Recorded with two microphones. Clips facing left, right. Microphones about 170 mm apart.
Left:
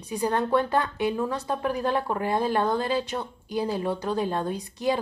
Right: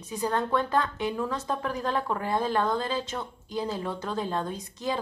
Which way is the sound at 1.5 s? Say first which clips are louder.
Left 3 dB; 10° left (ahead or behind).